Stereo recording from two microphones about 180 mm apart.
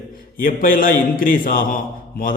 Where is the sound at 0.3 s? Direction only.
50° left (ahead or behind).